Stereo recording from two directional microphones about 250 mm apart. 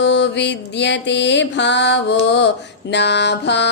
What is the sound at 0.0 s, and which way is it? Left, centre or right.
Mantra, left.